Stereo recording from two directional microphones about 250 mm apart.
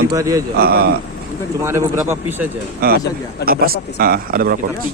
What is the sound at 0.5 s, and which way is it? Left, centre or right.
Speech, right.